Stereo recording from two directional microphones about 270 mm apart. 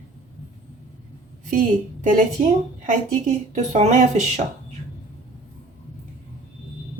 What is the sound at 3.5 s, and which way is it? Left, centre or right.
Speech, right.